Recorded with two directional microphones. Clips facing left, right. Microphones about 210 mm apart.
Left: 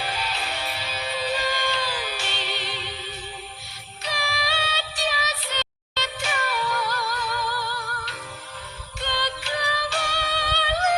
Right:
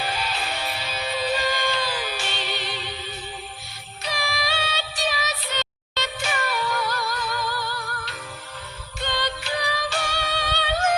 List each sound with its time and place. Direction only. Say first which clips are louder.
0.0 s music: right 2 dB; 45° right (ahead or behind)
4.0 s music: right 1 dB; 45° right (ahead or behind)
9.0 s music: right 1 dB; 45° right (ahead or behind)